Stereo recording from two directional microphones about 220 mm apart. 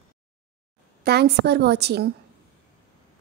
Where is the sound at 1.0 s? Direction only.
45° right (ahead or behind).